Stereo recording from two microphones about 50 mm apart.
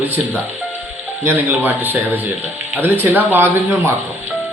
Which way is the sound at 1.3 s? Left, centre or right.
Right.